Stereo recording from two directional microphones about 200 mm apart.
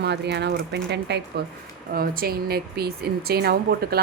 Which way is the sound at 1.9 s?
45° right (ahead or behind).